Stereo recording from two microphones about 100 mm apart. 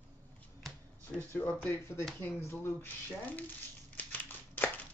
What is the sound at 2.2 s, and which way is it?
Speech, 20° left (ahead or behind).